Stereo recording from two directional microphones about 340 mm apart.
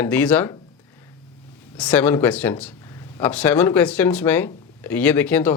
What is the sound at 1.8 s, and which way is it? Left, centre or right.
Speech, centre.